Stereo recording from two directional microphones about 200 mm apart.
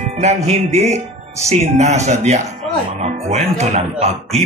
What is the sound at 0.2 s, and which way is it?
Speech, 35° right (ahead or behind).